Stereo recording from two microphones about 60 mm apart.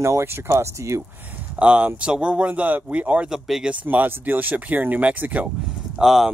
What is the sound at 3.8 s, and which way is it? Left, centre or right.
Speech, right.